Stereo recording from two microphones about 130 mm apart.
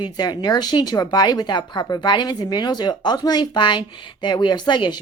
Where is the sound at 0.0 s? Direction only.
35° left (ahead or behind).